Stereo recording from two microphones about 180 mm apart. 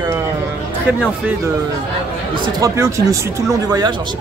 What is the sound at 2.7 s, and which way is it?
Speech, 15° right (ahead or behind).